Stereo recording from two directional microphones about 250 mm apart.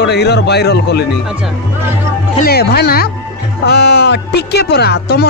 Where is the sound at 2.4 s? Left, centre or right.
Left.